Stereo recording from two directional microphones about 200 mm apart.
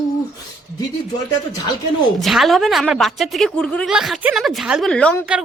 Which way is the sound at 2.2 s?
Centre (ahead or behind).